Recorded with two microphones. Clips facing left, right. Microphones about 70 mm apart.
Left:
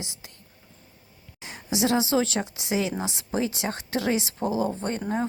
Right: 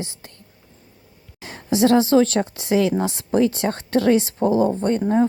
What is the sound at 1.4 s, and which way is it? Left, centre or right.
A woman's voice, right.